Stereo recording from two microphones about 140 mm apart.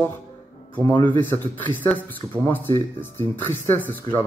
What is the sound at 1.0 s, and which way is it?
Speech, 15° left (ahead or behind).